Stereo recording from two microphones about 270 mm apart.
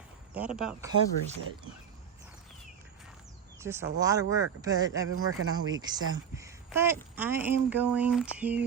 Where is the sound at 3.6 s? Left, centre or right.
Centre.